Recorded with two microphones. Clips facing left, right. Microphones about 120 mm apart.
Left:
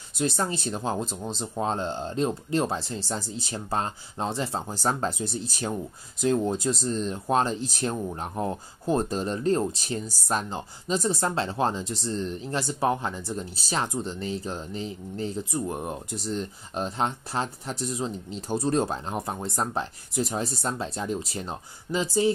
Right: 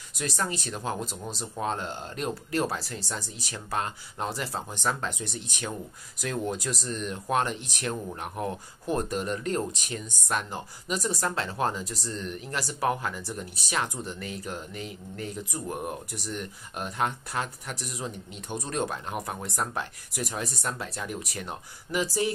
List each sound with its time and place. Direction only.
0.1 s speech: 30° left (ahead or behind)